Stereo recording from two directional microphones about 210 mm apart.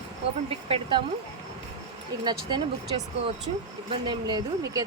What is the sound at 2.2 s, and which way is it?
Speech, 20° right (ahead or behind).